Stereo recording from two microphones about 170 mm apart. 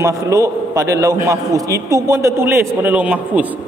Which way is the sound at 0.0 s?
20° right (ahead or behind).